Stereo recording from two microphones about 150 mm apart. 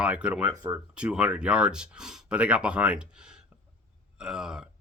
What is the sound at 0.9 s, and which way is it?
Speech, 5° right (ahead or behind).